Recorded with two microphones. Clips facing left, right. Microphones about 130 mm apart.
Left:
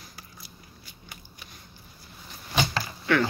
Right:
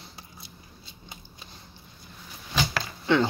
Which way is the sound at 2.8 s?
25° right (ahead or behind).